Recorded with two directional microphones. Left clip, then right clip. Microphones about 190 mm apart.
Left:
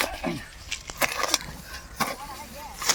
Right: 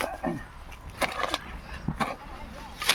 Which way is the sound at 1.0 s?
5° left (ahead or behind).